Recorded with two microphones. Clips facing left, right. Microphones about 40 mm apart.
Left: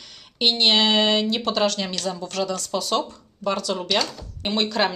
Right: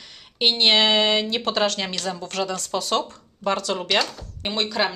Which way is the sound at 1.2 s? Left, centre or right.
Right.